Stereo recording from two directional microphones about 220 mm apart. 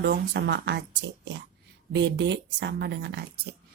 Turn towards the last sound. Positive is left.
turn(degrees=-50)  # may be behind; listen again after turning